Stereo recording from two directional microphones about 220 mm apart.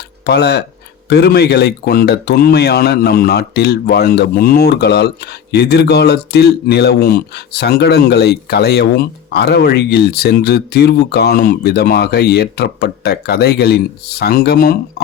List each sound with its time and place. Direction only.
0.3 s speech: 50° left (ahead or behind)